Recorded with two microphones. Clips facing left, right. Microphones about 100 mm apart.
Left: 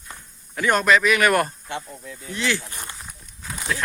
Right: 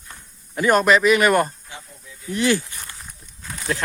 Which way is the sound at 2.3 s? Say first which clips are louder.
Right 6 dB; 45° right (ahead or behind).